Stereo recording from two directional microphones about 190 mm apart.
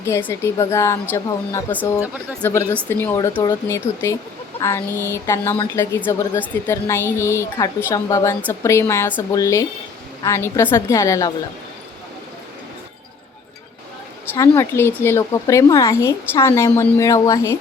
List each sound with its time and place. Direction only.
0.0 s a woman's voice: 10° left (ahead or behind)
14.3 s a woman's voice: 15° left (ahead or behind)